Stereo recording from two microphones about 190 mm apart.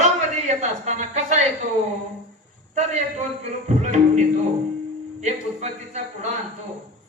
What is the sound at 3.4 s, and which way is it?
A man's voice, 40° right (ahead or behind).